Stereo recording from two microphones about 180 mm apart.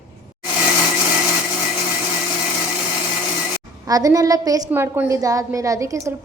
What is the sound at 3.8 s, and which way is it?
A woman's voice, 20° right (ahead or behind).